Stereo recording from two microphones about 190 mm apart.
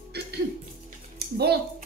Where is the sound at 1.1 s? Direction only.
55° right (ahead or behind).